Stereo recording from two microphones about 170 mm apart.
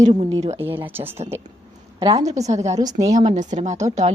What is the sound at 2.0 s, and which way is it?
Speech, 35° right (ahead or behind).